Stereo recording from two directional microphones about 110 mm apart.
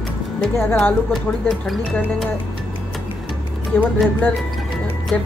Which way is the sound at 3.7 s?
20° left (ahead or behind).